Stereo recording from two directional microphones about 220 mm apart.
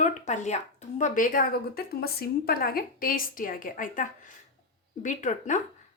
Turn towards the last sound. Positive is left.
turn(degrees=35)  # may be behind; listen again after turning